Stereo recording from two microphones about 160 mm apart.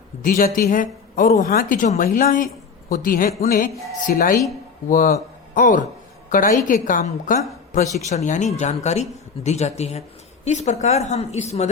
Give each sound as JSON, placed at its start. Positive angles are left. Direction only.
{"t": 0.2, "sound": "speech", "side_deg": 55}